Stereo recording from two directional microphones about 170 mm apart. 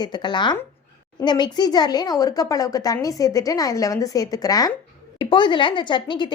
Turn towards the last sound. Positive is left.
turn(degrees=25)  # may be behind; listen again after turning